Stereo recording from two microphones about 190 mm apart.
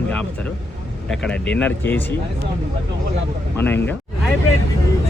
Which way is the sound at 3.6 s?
10° left (ahead or behind).